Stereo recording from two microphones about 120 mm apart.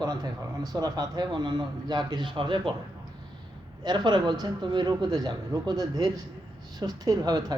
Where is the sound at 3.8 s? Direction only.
35° right (ahead or behind).